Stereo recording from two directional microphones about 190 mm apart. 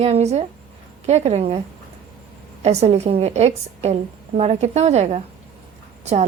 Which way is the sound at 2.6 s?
35° right (ahead or behind).